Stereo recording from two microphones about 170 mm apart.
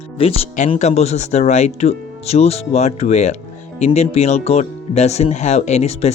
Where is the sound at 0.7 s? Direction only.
40° left (ahead or behind).